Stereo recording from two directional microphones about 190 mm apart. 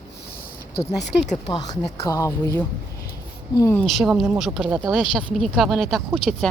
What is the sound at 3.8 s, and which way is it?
Speech, centre (ahead or behind).